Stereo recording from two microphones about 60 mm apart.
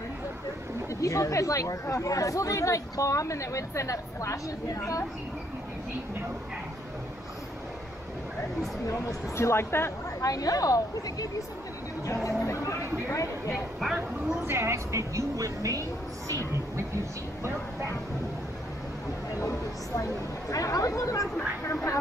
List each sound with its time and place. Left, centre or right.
0.8 s speech: left
8.8 s speech: left
10.2 s speech: left
12.1 s speech: left
13.5 s speech: centre
14.4 s a woman's voice: right
20.0 s speech: left